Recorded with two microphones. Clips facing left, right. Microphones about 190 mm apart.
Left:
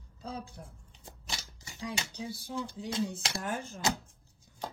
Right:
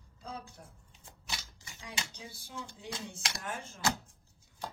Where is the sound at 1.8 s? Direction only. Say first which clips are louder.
Left 7 dB; 35° left (ahead or behind).